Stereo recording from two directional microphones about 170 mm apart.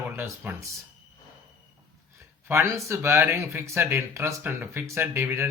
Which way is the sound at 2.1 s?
15° right (ahead or behind).